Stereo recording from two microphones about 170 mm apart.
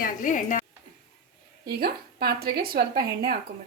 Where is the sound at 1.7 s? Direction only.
65° right (ahead or behind).